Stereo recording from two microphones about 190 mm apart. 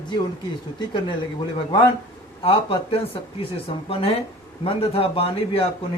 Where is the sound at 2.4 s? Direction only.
30° left (ahead or behind).